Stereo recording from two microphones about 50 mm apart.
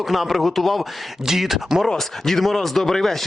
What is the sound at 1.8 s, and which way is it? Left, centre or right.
A man's voice, centre.